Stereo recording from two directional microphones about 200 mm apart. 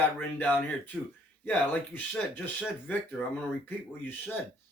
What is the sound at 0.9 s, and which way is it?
Speech, 5° right (ahead or behind).